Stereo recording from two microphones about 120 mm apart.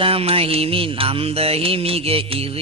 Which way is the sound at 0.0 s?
55° right (ahead or behind).